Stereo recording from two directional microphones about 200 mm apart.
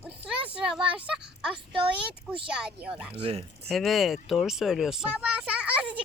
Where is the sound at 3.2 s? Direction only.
30° right (ahead or behind).